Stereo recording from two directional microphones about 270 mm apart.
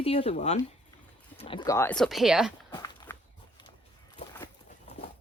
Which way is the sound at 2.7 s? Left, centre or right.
Centre.